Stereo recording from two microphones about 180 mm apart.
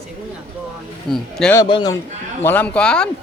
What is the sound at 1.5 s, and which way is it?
Speech, 25° left (ahead or behind).